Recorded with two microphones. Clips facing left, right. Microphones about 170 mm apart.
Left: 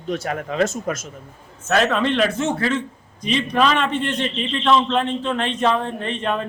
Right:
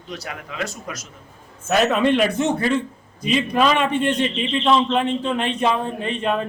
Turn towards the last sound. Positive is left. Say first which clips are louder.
# right 1 dB
turn(degrees=-10)  # may be behind; listen again after turning